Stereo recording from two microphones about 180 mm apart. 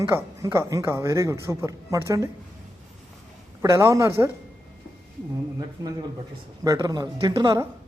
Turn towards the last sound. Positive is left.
turn(degrees=-25)  # may be behind; listen again after turning